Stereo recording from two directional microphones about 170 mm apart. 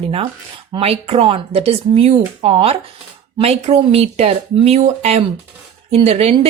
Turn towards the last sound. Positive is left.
turn(degrees=-35)  # may be behind; listen again after turning